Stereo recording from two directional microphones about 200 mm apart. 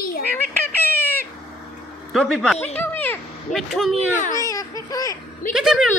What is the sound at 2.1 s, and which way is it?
Speech, centre (ahead or behind).